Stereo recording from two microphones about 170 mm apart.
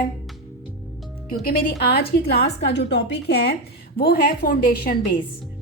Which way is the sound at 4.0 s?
60° left (ahead or behind).